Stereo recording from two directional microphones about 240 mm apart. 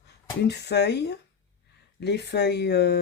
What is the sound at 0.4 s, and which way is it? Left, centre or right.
Speech, left.